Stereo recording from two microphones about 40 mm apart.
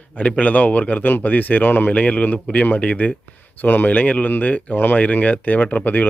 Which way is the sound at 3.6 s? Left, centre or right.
Left.